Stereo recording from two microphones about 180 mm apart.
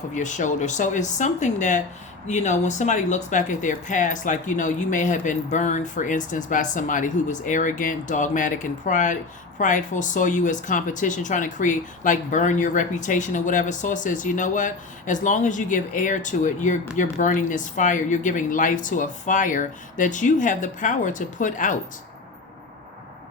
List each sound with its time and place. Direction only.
0.1 s speech: 45° left (ahead or behind)